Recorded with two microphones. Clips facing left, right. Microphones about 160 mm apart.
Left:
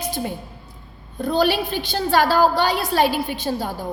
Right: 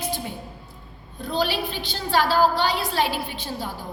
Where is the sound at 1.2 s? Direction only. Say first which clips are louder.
Left 6 dB; 50° left (ahead or behind).